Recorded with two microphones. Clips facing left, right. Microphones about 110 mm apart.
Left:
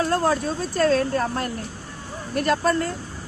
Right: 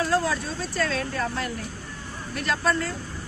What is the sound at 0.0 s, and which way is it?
Speech, 45° left (ahead or behind).